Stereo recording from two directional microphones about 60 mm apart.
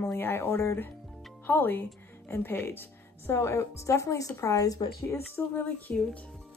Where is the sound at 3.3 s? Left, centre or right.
Left.